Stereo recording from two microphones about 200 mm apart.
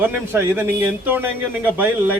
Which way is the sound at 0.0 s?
10° right (ahead or behind).